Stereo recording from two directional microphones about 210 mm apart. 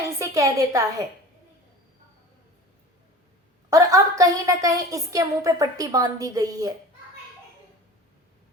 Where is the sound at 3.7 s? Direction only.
15° right (ahead or behind).